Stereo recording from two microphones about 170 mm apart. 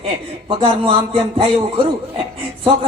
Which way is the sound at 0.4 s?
30° right (ahead or behind).